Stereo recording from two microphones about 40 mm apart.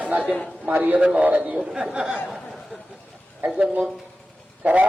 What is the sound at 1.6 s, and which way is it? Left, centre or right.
Speech, centre.